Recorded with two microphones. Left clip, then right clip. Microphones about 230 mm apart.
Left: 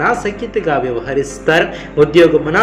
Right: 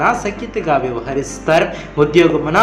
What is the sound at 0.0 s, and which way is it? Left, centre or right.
Speech, centre.